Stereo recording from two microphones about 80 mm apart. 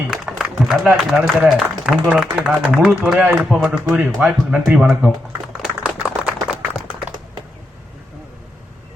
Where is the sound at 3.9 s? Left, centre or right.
Centre.